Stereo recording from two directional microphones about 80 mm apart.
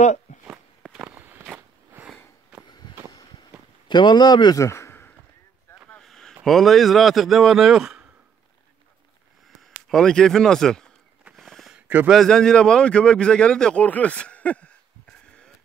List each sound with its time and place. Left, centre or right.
0.9 s walk: right
3.1 s vehicle: left
3.9 s speech: left
4.6 s a sound: left
6.0 s a sound: centre
6.4 s speech: centre
9.6 s speech: centre
11.3 s a sound: centre
12.1 s speech: centre